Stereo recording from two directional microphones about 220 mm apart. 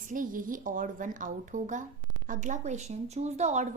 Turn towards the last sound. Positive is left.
turn(degrees=-30)  # may be behind; listen again after turning